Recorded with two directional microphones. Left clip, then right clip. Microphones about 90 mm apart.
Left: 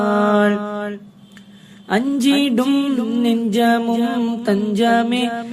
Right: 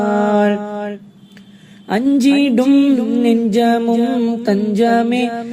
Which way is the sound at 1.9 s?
50° right (ahead or behind).